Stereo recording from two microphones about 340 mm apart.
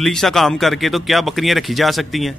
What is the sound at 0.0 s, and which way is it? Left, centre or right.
Speech, centre.